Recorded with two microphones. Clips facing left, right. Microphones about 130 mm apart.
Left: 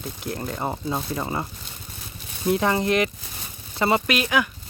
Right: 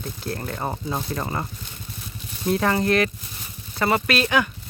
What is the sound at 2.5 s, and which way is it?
Speech, 20° left (ahead or behind).